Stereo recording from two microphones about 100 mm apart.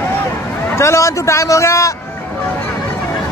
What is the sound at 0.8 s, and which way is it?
A man's voice, 30° left (ahead or behind).